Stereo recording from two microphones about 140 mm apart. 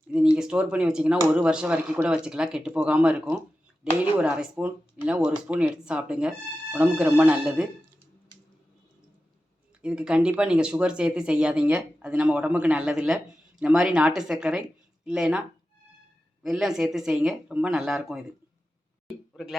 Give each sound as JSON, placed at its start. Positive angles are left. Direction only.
{"t": 0.3, "sound": "speech", "side_deg": -5}
{"t": 9.8, "sound": "speech", "side_deg": -5}